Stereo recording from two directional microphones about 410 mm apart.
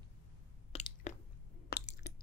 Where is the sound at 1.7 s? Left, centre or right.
Left.